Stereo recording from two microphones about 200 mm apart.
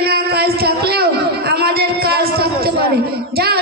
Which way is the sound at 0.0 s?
50° right (ahead or behind).